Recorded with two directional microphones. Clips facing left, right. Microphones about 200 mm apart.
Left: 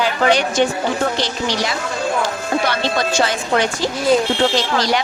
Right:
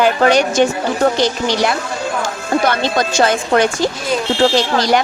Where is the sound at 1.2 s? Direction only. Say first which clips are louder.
Right 5 dB; 55° right (ahead or behind).